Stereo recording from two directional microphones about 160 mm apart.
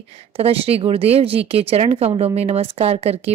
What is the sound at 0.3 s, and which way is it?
A woman's voice, 35° right (ahead or behind).